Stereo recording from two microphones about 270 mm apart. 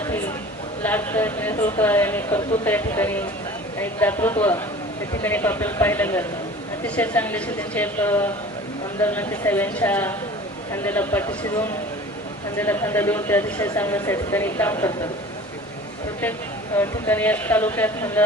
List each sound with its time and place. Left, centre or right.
0.8 s speech: centre
16.7 s speech: centre